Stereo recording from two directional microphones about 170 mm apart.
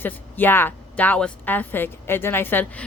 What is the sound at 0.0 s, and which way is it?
A woman's voice, 10° left (ahead or behind).